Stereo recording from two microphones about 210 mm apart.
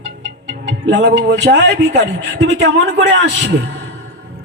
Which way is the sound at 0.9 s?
55° right (ahead or behind).